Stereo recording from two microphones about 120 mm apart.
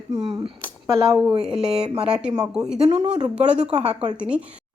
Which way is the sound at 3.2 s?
10° right (ahead or behind).